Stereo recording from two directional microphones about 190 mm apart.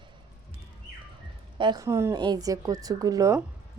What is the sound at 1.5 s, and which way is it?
Speech, 25° right (ahead or behind).